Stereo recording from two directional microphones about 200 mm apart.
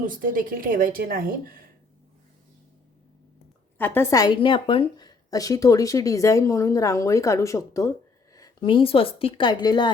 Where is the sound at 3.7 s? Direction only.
10° left (ahead or behind).